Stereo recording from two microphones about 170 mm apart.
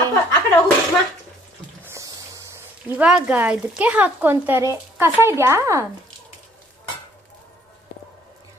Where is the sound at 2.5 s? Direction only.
5° right (ahead or behind).